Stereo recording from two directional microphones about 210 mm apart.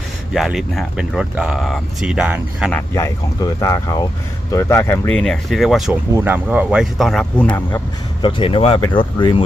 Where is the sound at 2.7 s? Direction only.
10° left (ahead or behind).